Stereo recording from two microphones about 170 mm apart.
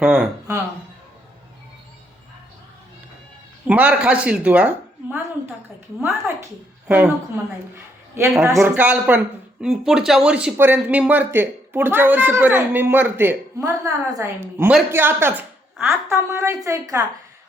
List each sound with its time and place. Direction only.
0.0 s speech: 5° right (ahead or behind)
3.7 s speech: 10° right (ahead or behind)
6.2 s speech: 10° right (ahead or behind)
8.1 s speech: 15° right (ahead or behind)